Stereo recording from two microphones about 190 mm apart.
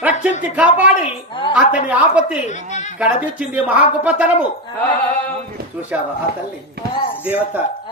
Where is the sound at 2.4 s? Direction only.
40° left (ahead or behind).